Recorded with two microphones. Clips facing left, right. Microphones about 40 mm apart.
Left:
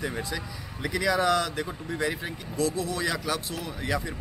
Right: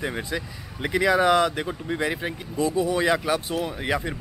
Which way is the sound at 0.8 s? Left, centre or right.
Right.